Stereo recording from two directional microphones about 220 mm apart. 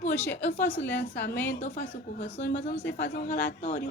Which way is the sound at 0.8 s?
50° left (ahead or behind).